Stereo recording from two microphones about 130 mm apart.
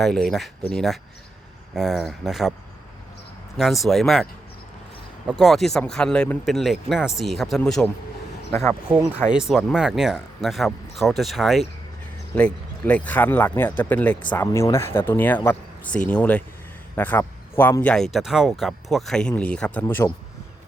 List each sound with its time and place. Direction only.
0.0 s speech: 5° left (ahead or behind)
3.6 s speech: centre (ahead or behind)
5.2 s speech: 10° right (ahead or behind)
5.5 s speech: centre (ahead or behind)
9.1 s speech: 5° right (ahead or behind)
12.3 s speech: 10° left (ahead or behind)
14.5 s a man's voice: 20° left (ahead or behind)
17.9 s speech: centre (ahead or behind)